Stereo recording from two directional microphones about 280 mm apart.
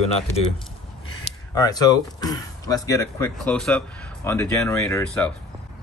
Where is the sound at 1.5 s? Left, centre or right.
Centre.